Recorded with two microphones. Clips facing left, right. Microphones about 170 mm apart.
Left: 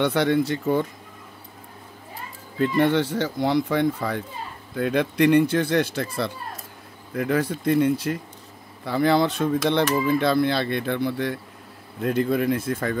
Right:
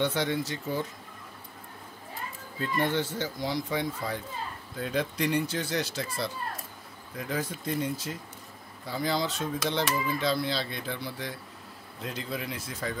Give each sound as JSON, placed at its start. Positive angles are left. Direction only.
{"t": 0.0, "sound": "speech", "side_deg": 65}
{"t": 2.6, "sound": "speech", "side_deg": 70}